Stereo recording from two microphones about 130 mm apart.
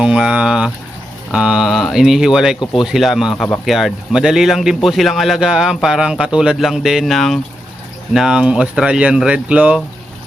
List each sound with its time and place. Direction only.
0.0 s speech: 5° right (ahead or behind)